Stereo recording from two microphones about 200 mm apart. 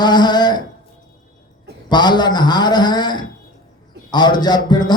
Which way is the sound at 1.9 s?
20° left (ahead or behind).